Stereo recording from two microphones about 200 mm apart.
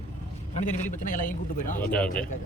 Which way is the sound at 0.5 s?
40° left (ahead or behind).